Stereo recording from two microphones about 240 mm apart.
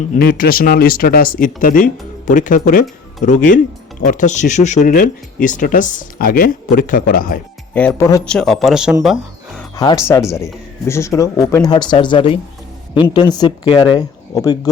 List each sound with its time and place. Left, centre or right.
0.2 s speech: left
7.7 s speech: centre
9.7 s speech: centre